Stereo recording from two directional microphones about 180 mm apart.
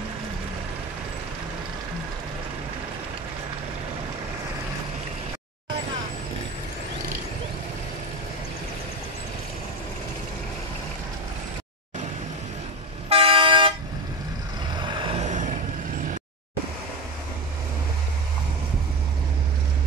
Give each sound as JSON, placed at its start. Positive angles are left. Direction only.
{"t": 13.1, "sound": "toot", "side_deg": -30}
{"t": 15.0, "sound": "vehicle", "side_deg": -40}